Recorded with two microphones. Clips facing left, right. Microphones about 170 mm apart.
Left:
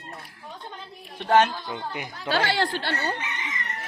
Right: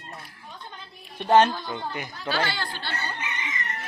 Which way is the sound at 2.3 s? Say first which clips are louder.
Left 5 dB; 75° left (ahead or behind).